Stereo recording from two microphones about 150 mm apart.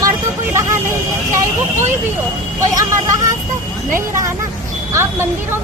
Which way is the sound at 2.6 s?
25° right (ahead or behind).